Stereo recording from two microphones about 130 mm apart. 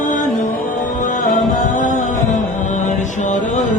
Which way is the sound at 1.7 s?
75° left (ahead or behind).